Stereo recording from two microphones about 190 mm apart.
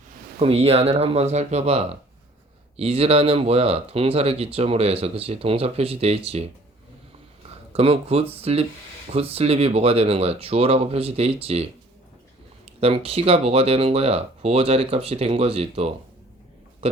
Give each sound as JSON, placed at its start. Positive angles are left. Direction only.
{"t": 0.3, "sound": "speech", "side_deg": -30}
{"t": 7.7, "sound": "speech", "side_deg": -30}
{"t": 16.8, "sound": "a sound", "side_deg": -30}